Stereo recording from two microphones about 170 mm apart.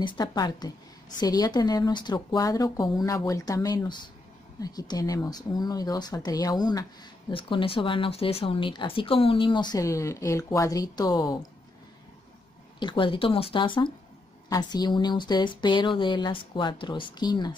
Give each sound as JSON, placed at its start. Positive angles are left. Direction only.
{"t": 0.0, "sound": "speech", "side_deg": 25}
{"t": 12.7, "sound": "speech", "side_deg": 30}